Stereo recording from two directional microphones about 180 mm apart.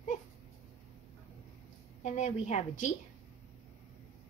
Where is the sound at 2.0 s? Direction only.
40° left (ahead or behind).